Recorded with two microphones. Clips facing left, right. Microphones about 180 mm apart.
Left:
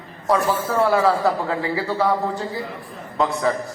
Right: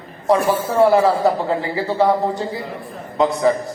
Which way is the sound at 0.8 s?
25° right (ahead or behind).